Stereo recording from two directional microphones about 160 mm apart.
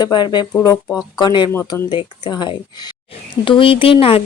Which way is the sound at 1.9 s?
30° left (ahead or behind).